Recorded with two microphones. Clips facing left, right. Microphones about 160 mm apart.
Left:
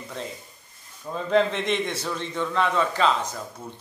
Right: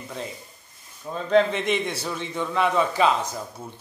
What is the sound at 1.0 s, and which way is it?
A man's voice, centre (ahead or behind).